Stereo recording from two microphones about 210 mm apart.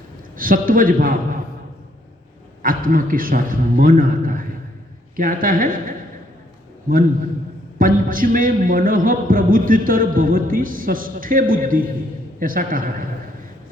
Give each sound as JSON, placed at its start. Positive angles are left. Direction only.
{"t": 0.3, "sound": "a man's voice", "side_deg": -40}
{"t": 2.6, "sound": "a man's voice", "side_deg": -40}
{"t": 7.8, "sound": "a man's voice", "side_deg": -40}